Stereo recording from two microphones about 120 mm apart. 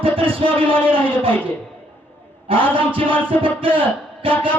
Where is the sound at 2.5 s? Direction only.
45° right (ahead or behind).